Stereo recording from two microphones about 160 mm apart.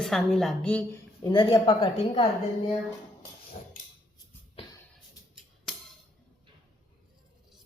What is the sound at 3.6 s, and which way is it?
Cutlery, 60° left (ahead or behind).